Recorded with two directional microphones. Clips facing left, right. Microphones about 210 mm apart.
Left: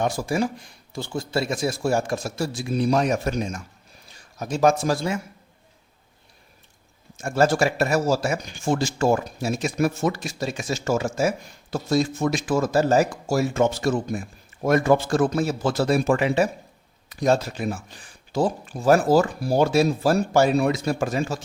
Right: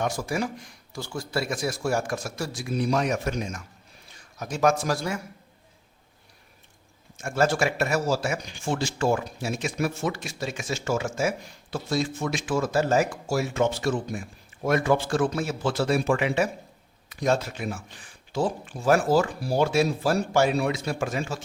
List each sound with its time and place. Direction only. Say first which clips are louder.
0.0 s a man's voice: left 4 dB; 30° left (ahead or behind)
7.2 s speech: left 4 dB; 35° left (ahead or behind)